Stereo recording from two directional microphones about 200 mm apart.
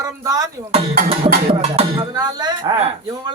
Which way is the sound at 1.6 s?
30° right (ahead or behind).